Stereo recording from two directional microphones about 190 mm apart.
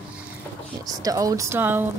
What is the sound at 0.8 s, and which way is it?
Speech, 20° right (ahead or behind).